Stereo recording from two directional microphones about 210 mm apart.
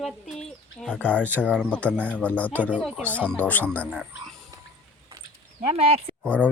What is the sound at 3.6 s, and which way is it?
Speech, 10° right (ahead or behind).